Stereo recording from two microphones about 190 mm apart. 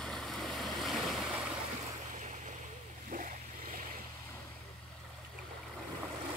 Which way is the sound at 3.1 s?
45° right (ahead or behind).